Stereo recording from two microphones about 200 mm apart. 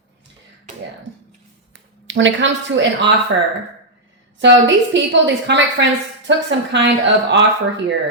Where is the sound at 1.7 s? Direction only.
65° right (ahead or behind).